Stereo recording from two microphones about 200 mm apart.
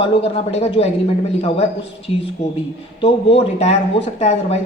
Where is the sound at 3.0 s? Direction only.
30° left (ahead or behind).